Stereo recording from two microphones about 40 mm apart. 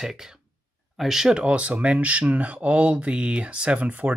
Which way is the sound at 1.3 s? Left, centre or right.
Right.